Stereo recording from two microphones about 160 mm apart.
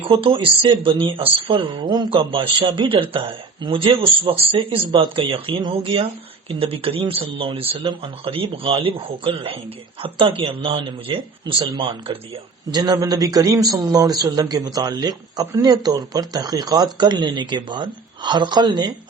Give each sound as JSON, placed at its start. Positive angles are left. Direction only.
{"t": 0.0, "sound": "speech", "side_deg": -35}